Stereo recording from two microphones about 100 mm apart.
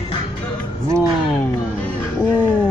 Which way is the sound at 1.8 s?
15° left (ahead or behind).